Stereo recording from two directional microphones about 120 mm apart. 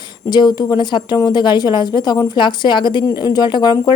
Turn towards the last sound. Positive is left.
turn(degrees=35)  # may be behind; listen again after turning